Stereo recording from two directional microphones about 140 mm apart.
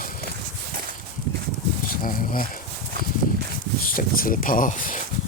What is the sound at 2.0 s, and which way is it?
Speech, 80° left.